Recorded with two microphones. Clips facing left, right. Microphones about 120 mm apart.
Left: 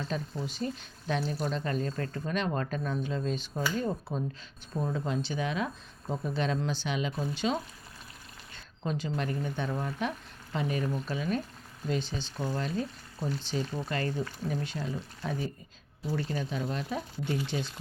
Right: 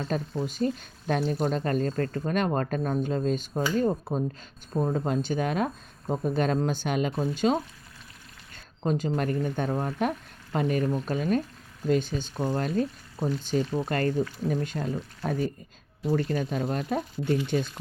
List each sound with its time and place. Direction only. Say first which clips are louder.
0.1 s speech: right 5 dB; 45° right (ahead or behind)
4.9 s speech: right 5 dB; 50° right (ahead or behind)